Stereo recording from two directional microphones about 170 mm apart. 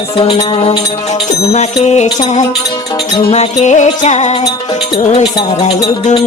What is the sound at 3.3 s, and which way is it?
Music, 40° left (ahead or behind).